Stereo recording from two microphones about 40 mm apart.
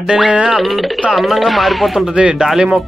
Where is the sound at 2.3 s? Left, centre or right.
Centre.